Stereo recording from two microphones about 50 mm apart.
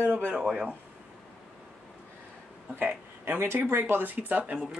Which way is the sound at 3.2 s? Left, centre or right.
Right.